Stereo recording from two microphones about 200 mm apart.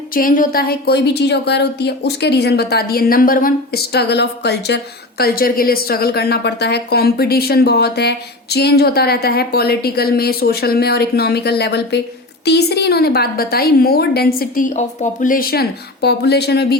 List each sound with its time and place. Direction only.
0.1 s a woman's voice: 45° left (ahead or behind)